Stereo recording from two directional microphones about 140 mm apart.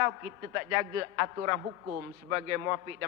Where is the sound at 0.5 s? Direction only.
20° right (ahead or behind).